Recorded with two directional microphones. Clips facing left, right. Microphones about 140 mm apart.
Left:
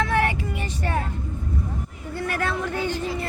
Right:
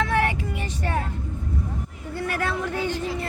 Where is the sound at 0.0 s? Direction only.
Centre (ahead or behind).